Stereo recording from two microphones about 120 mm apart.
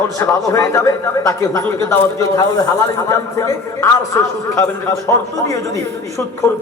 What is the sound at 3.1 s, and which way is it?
A man's voice, 25° left (ahead or behind).